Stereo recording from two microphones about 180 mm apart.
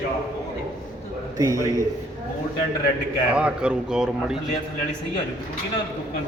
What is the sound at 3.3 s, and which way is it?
Speech, 5° right (ahead or behind).